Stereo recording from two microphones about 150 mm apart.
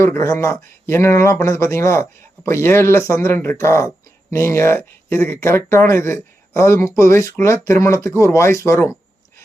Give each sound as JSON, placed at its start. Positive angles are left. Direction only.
{"t": 0.0, "sound": "speech", "side_deg": 20}